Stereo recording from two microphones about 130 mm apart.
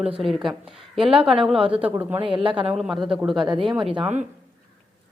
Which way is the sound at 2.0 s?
15° right (ahead or behind).